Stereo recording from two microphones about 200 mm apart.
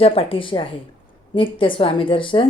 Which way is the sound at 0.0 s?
30° left (ahead or behind).